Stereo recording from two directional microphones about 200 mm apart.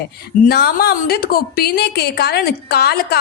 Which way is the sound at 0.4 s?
50° left (ahead or behind).